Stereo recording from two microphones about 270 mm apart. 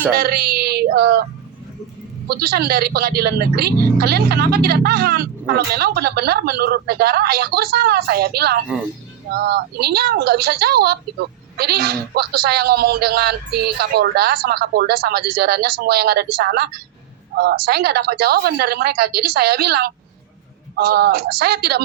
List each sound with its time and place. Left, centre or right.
0.1 s speech: right
2.2 s speech: right